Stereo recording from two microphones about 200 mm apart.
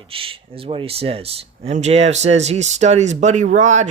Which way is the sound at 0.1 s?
25° right (ahead or behind).